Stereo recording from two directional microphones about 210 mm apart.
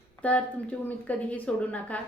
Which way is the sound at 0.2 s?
5° left (ahead or behind).